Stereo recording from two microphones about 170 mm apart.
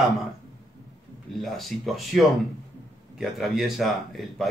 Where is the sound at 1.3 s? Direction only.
Centre (ahead or behind).